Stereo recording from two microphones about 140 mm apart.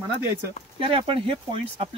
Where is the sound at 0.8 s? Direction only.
40° right (ahead or behind).